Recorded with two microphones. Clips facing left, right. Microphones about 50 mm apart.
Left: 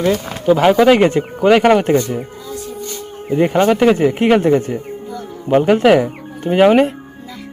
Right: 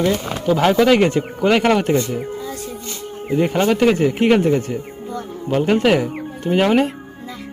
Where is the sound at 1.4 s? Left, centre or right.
Centre.